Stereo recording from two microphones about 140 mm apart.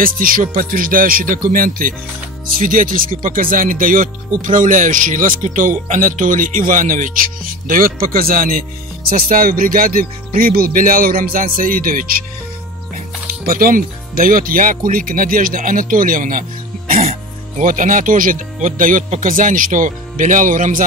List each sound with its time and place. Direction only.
0.0 s speech: 85° right
13.5 s speech: 85° right
17.0 s music: 50° right (ahead or behind)
17.6 s speech: 70° right (ahead or behind)